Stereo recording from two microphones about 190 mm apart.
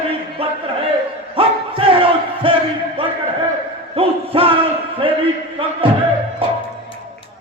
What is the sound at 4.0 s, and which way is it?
Music, 30° right (ahead or behind).